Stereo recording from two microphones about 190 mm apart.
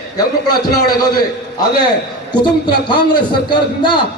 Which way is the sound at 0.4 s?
20° left (ahead or behind).